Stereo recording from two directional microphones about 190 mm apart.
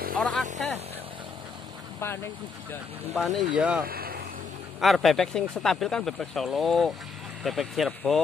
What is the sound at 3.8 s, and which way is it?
Vehicle, 50° right (ahead or behind).